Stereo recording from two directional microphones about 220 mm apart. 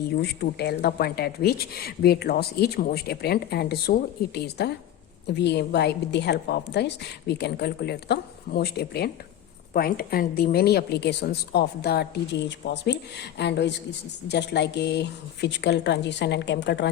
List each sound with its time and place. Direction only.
0.2 s a woman's voice: 45° left (ahead or behind)